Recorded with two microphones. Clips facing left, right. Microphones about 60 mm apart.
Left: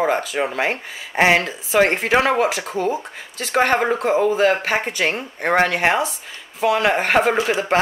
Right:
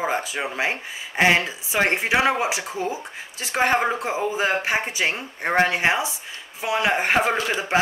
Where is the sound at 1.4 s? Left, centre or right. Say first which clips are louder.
Left 5 dB; left.